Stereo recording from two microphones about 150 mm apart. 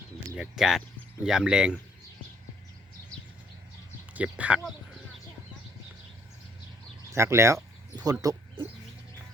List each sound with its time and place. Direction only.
0.3 s speech: 5° right (ahead or behind)
4.1 s speech: 10° right (ahead or behind)
7.1 s speech: 20° right (ahead or behind)